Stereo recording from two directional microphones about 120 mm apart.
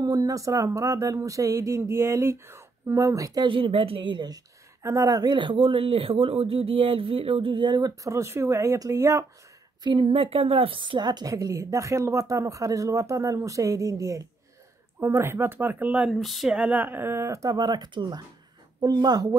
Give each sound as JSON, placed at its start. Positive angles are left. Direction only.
{"t": 0.0, "sound": "a woman's voice", "side_deg": -30}
{"t": 3.4, "sound": "a woman's voice", "side_deg": -45}
{"t": 4.8, "sound": "speech", "side_deg": -30}
{"t": 9.8, "sound": "a woman's voice", "side_deg": -40}
{"t": 16.2, "sound": "a woman's voice", "side_deg": 0}